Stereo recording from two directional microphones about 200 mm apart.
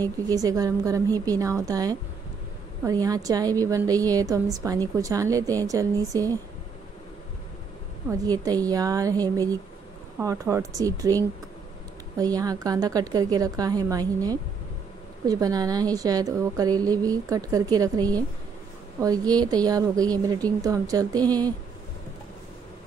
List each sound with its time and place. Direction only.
0.0 s a woman's voice: 20° right (ahead or behind)
8.1 s a woman's voice: 20° right (ahead or behind)